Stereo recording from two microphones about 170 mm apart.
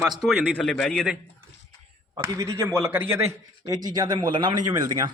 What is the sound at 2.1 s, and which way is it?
A man's voice, 15° right (ahead or behind).